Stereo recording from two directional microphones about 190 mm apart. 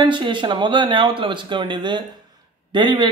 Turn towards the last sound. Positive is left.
turn(degrees=-25)  # may be behind; listen again after turning